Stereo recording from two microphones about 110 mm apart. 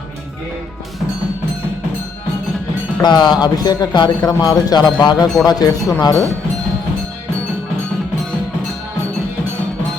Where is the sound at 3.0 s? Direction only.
40° left (ahead or behind).